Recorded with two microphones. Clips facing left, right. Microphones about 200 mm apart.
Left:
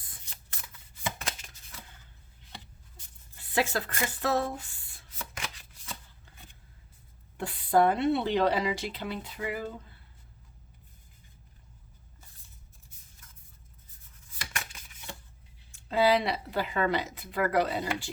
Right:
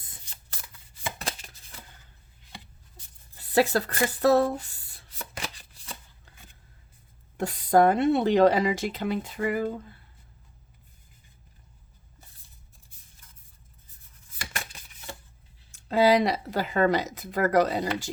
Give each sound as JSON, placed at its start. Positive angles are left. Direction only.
{"t": 3.3, "sound": "a sound", "side_deg": -35}
{"t": 7.3, "sound": "speech", "side_deg": -45}
{"t": 15.7, "sound": "speech", "side_deg": -40}